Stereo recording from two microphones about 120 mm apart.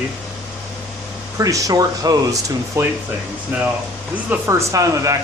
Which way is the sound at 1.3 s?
30° right (ahead or behind).